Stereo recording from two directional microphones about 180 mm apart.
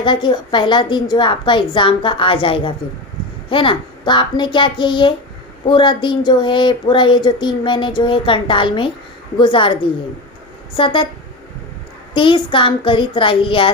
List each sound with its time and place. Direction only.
0.0 s speech: 25° left (ahead or behind)
12.1 s speech: 30° left (ahead or behind)